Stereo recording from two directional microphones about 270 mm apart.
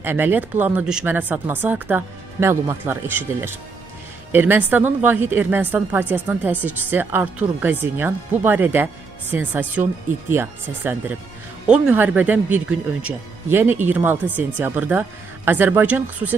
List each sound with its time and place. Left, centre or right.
0.0 s a woman's voice: centre